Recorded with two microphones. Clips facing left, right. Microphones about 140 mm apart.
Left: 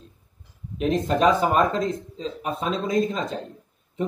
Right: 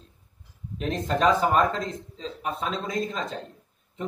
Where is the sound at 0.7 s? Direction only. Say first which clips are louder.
Left 5 dB; 10° left (ahead or behind).